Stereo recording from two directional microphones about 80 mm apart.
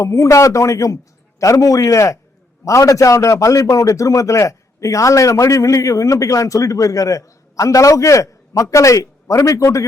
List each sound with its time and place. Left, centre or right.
0.0 s a man's voice: left